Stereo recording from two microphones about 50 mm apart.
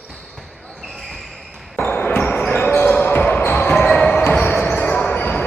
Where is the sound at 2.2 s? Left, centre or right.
Left.